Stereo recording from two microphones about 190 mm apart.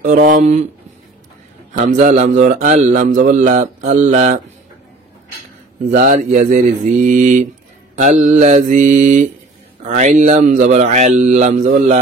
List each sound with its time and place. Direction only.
0.0 s speech: 45° right (ahead or behind)
1.7 s speech: 40° right (ahead or behind)
5.9 s speech: 45° right (ahead or behind)